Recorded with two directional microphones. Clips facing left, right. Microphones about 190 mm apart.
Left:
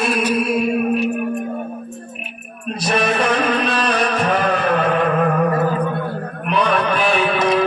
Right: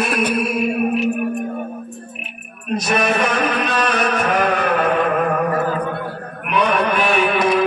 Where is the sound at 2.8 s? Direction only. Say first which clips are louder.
Left 1 dB; 35° left (ahead or behind).